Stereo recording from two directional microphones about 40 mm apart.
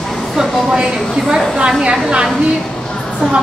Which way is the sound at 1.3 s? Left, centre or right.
Right.